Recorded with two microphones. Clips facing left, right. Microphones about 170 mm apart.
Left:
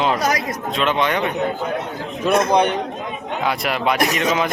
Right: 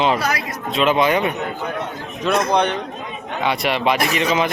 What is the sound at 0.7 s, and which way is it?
Speech, 5° right (ahead or behind).